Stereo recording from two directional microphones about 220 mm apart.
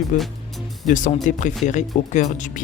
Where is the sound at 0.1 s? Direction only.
35° left (ahead or behind).